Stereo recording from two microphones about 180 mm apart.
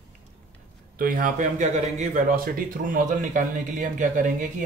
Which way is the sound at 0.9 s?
50° right (ahead or behind).